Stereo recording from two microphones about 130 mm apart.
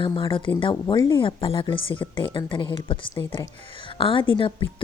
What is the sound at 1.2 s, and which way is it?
A woman's voice, 45° left (ahead or behind).